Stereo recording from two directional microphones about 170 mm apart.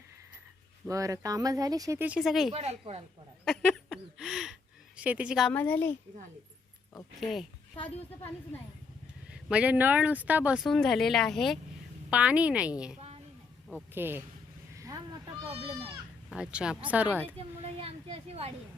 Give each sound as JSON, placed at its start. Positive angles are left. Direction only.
{"t": 0.9, "sound": "speech", "side_deg": -20}
{"t": 2.5, "sound": "speech", "side_deg": -35}
{"t": 3.4, "sound": "a sound", "side_deg": 5}
{"t": 4.9, "sound": "speech", "side_deg": -10}
{"t": 5.5, "sound": "speech", "side_deg": 10}
{"t": 7.2, "sound": "speech", "side_deg": 0}
{"t": 9.3, "sound": "speech", "side_deg": -5}
{"t": 14.8, "sound": "a sound", "side_deg": -20}
{"t": 15.4, "sound": "speech", "side_deg": -35}
{"t": 16.3, "sound": "speech", "side_deg": -5}
{"t": 17.6, "sound": "speech", "side_deg": -35}